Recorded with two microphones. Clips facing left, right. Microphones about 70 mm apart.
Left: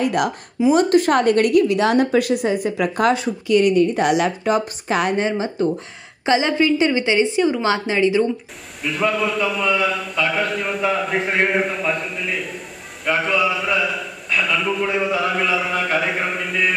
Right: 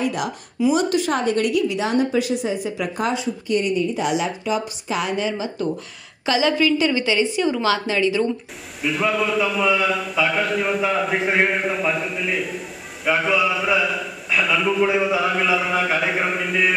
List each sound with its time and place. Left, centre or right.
0.0 s a woman's voice: left
0.7 s a woman's voice: left
6.2 s a woman's voice: left
8.8 s a man's voice: centre